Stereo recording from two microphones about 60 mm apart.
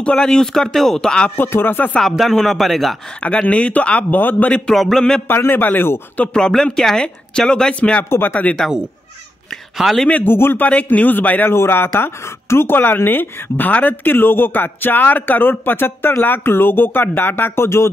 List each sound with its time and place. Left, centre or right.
0.0 s speech: centre
1.3 s a man's voice: left
2.0 s speech: centre
3.2 s speech: left
4.6 s speech: centre
5.4 s a man's voice: left
6.3 s speech: centre
8.1 s a man's voice: left
9.8 s speech: centre
10.2 s a man's voice: left
10.6 s speech: left
11.5 s a man's voice: left
17.6 s speech: left